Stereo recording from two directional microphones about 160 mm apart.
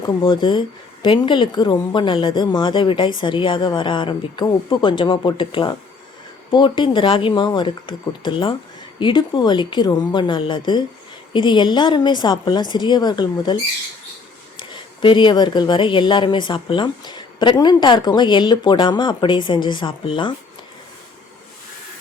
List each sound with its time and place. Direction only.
0.0 s a woman's voice: 30° left (ahead or behind)